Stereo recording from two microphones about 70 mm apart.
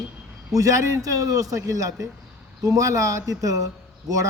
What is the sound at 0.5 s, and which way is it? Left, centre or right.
A man's voice, right.